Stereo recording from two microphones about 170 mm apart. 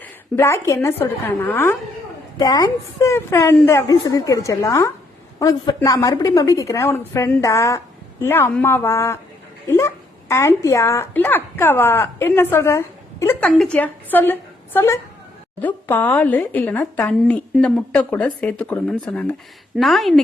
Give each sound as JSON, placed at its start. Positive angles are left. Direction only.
{"t": 0.0, "sound": "a woman's voice", "side_deg": 15}
{"t": 13.4, "sound": "speech", "side_deg": 5}